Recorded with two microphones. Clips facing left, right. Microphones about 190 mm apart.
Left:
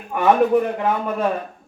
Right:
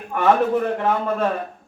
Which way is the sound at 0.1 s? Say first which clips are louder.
Left 2 dB; 15° left (ahead or behind).